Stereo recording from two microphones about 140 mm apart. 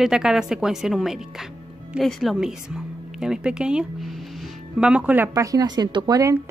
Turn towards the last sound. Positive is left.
turn(degrees=-25)  # may be behind; listen again after turning